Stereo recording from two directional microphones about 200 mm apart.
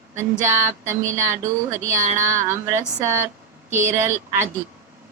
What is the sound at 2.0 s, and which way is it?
Speech, 40° right (ahead or behind).